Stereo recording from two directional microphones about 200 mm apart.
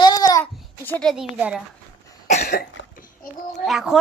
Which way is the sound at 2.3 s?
35° left (ahead or behind).